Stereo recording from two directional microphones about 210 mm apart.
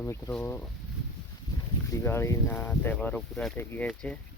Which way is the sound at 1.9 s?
10° left (ahead or behind).